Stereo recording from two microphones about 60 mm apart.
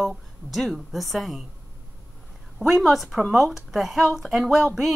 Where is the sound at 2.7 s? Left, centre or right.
Centre.